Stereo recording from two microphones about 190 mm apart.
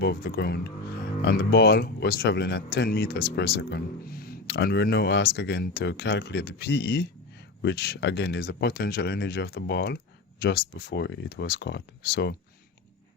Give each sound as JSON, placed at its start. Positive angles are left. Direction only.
{"t": 0.0, "sound": "speech", "side_deg": 60}